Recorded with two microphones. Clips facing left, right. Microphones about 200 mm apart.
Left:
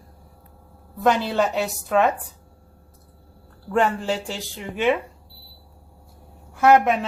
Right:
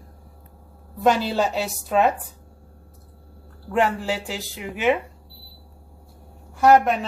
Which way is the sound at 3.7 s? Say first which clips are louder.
Left 1 dB; 5° right (ahead or behind).